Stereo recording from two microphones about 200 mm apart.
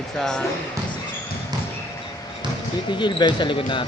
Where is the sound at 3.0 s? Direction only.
20° left (ahead or behind).